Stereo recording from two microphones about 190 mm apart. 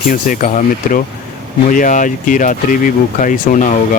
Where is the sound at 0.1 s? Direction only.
45° left (ahead or behind).